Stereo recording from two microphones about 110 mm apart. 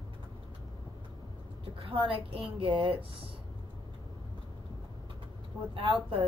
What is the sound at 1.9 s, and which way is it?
A woman's voice, 55° right (ahead or behind).